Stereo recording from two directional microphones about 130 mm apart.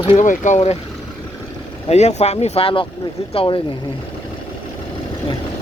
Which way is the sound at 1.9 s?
55° left (ahead or behind).